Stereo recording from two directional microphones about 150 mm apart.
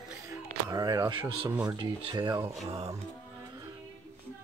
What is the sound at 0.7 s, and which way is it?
Speech, 25° right (ahead or behind).